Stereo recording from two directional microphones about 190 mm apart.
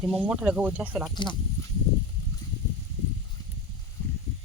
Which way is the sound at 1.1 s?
25° left (ahead or behind).